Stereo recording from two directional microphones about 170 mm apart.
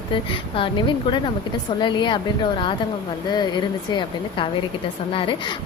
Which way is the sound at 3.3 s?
25° left (ahead or behind).